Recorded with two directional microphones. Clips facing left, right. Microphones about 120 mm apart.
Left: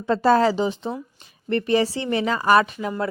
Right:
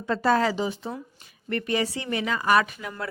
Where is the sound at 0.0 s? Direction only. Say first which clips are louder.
Left 5 dB; 30° left (ahead or behind).